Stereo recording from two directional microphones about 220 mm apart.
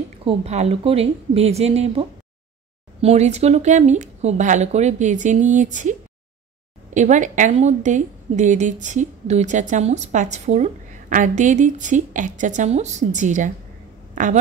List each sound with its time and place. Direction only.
0.2 s a woman's voice: 25° right (ahead or behind)